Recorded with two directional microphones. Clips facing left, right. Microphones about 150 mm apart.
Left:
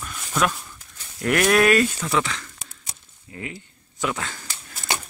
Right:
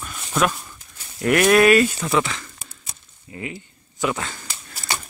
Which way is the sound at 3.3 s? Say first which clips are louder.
Right 3 dB; 5° right (ahead or behind).